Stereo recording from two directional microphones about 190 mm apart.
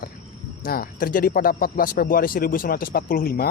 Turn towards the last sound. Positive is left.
turn(degrees=50)  # may be behind; listen again after turning